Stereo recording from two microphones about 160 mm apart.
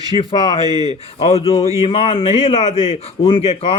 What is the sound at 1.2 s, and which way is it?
Speech, 40° left (ahead or behind).